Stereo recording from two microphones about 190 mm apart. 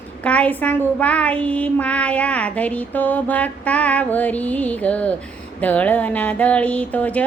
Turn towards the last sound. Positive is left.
turn(degrees=10)  # may be behind; listen again after turning